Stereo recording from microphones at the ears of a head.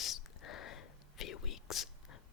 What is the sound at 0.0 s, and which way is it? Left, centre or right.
Whispering, left.